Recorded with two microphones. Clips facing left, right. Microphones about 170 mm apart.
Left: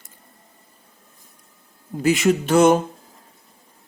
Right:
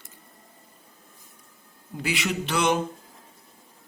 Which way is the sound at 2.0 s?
45° left (ahead or behind).